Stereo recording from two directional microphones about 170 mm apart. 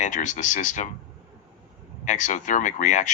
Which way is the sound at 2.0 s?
45° left (ahead or behind).